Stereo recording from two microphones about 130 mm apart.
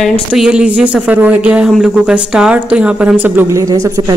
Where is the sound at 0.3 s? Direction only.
10° right (ahead or behind).